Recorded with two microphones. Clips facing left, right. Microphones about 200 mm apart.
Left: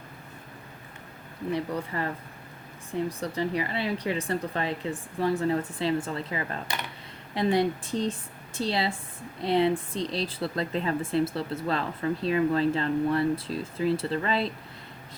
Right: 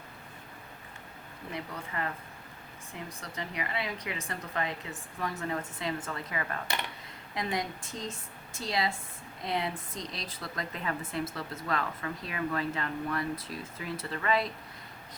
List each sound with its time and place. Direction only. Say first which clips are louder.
1.5 s speech: left 6 dB; 35° left (ahead or behind)
3.1 s a woman's voice: left 11 dB; 35° left (ahead or behind)